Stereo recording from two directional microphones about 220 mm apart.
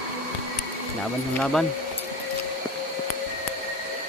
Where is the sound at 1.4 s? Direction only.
Centre (ahead or behind).